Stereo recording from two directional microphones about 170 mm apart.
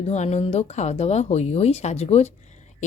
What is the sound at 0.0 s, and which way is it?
A woman's voice, 40° left (ahead or behind).